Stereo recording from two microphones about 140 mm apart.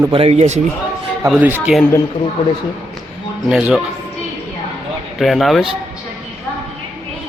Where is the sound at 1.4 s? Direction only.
15° right (ahead or behind).